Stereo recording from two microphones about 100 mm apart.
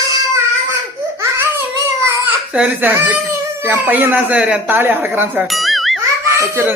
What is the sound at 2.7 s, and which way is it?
Speech, 20° right (ahead or behind).